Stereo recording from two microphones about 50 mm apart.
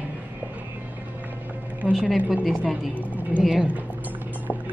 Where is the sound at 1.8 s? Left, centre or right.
Right.